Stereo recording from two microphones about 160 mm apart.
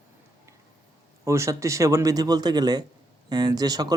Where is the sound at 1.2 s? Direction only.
20° right (ahead or behind).